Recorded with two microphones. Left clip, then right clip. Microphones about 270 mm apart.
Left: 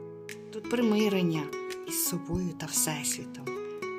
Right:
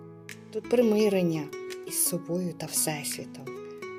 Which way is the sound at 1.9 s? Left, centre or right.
Centre.